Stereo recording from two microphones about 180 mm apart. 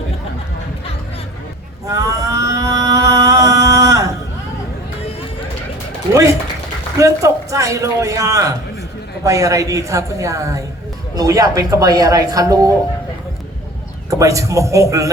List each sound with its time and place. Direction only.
1.9 s a sound: 20° right (ahead or behind)
7.0 s a man's voice: 15° right (ahead or behind)
14.1 s a man's voice: 15° right (ahead or behind)